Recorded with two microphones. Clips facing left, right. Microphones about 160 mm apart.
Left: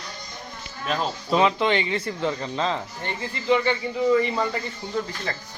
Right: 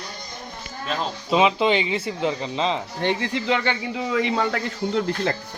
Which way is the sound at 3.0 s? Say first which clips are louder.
Right 8 dB; 90° right.